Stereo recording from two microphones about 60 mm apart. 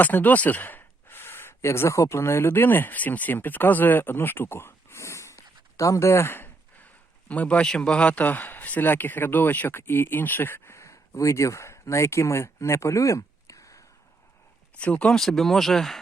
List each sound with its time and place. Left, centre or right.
0.0 s speech: left
7.3 s a man's voice: left
10.8 s speech: left
14.8 s speech: left
15.1 s speech: centre